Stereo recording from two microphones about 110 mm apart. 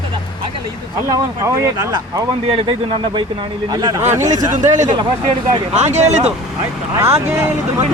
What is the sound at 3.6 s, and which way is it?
Speech, 35° right (ahead or behind).